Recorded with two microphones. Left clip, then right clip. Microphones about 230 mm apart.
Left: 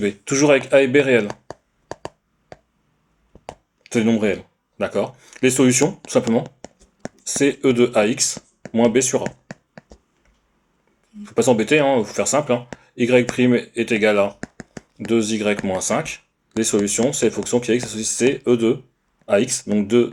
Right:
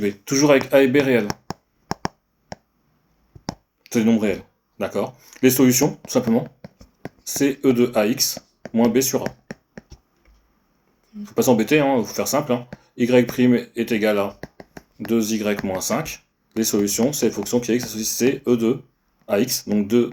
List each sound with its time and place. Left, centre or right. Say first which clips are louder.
0.0 s speech: left 1 dB; left
3.8 s speech: left 1 dB; left
9.2 s a sound: left 1 dB; centre
11.2 s speech: left 1 dB; left